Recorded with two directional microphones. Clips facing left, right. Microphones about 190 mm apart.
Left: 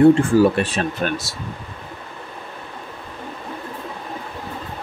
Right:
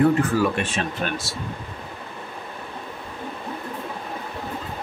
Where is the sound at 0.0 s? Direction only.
30° left (ahead or behind).